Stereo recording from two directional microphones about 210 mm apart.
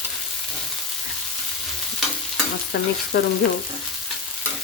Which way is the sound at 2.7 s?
50° left (ahead or behind).